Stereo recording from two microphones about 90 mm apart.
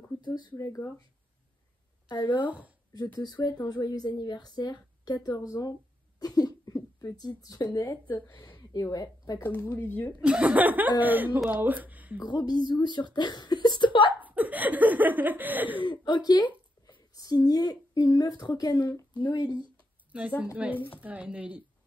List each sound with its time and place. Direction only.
0.2 s speech: 55° left (ahead or behind)
0.6 s speech: 35° left (ahead or behind)
2.0 s speech: 60° left (ahead or behind)
2.4 s speech: 15° right (ahead or behind)
2.9 s a woman's voice: 50° left (ahead or behind)
9.6 s speech: 25° left (ahead or behind)
10.2 s speech: 15° right (ahead or behind)
12.4 s a woman's voice: 50° left (ahead or behind)
14.2 s speech: 20° right (ahead or behind)
15.8 s a woman's voice: 60° left (ahead or behind)
20.1 s a woman's voice: 15° right (ahead or behind)